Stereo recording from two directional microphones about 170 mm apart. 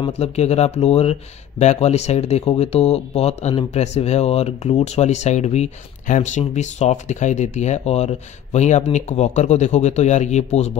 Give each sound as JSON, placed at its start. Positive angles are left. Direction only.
{"t": 0.0, "sound": "speech", "side_deg": 40}